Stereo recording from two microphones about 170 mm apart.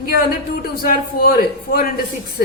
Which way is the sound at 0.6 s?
60° left (ahead or behind).